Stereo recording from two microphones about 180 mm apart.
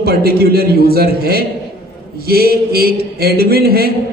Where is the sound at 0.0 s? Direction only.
60° right (ahead or behind).